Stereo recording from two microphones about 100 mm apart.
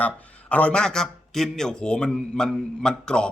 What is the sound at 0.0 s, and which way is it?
A man's voice, 15° left (ahead or behind).